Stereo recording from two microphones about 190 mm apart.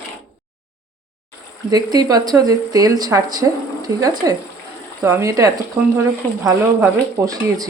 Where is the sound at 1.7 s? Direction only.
20° right (ahead or behind).